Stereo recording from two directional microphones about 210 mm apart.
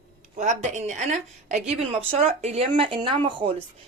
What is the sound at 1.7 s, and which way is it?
Speech, 30° right (ahead or behind).